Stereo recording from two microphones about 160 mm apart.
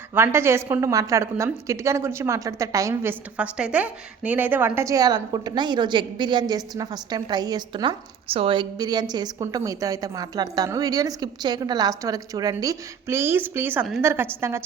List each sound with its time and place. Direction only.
0.1 s a woman's voice: 15° right (ahead or behind)